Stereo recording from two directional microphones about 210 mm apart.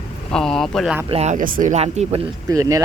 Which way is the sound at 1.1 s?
30° right (ahead or behind).